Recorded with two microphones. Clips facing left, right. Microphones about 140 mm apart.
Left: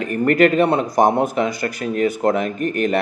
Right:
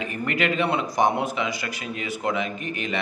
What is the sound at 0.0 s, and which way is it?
Speech, 45° left (ahead or behind).